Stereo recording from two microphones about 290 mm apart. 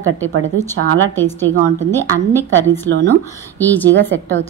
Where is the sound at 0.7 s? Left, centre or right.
Centre.